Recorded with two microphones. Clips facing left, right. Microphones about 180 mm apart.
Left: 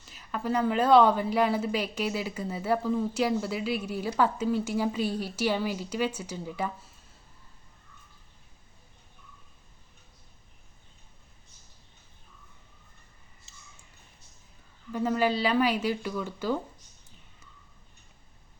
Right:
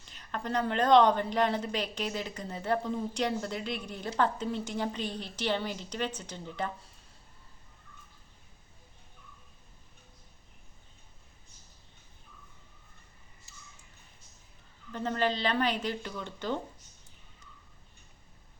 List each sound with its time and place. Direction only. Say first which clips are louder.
0.1 s a woman's voice: left 4 dB; 5° left (ahead or behind)
13.5 s a sound: right 1 dB; 20° left (ahead or behind)
14.9 s a woman's voice: left 4 dB; 10° left (ahead or behind)